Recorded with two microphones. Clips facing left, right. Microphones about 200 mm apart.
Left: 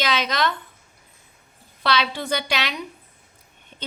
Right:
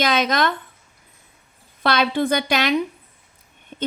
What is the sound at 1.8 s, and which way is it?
Speech, 50° right (ahead or behind).